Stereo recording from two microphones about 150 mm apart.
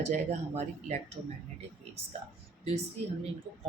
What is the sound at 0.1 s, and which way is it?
Speech, 45° right (ahead or behind).